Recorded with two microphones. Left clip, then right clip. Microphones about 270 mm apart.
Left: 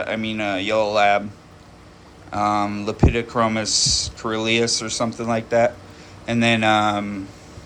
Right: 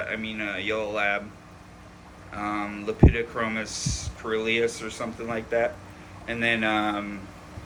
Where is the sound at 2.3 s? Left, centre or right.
Centre.